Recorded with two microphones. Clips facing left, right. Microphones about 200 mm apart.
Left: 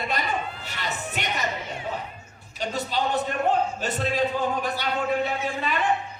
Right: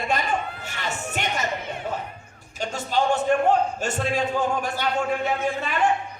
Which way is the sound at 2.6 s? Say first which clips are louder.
Right 3 dB; 45° right (ahead or behind).